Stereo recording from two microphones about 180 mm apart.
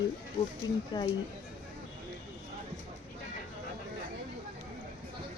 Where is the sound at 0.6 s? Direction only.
25° left (ahead or behind).